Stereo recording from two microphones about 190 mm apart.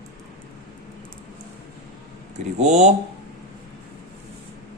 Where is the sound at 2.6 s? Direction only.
35° right (ahead or behind).